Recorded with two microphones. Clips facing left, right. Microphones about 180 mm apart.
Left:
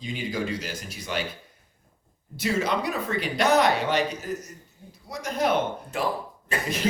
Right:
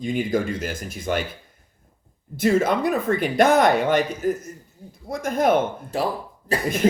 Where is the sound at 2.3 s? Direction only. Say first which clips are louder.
Right 6 dB; 50° right (ahead or behind).